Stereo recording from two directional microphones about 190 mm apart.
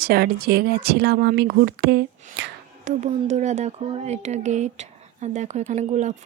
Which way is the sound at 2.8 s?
35° right (ahead or behind).